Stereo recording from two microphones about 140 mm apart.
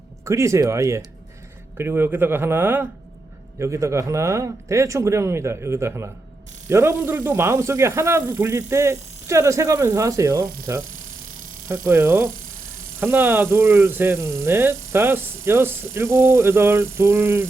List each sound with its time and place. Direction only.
0.3 s a man's voice: 20° right (ahead or behind)